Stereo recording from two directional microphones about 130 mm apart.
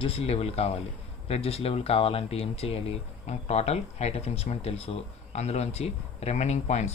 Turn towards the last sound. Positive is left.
turn(degrees=60)  # may be behind; listen again after turning